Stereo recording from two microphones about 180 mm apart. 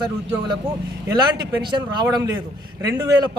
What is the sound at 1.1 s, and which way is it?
A man's voice, 25° right (ahead or behind).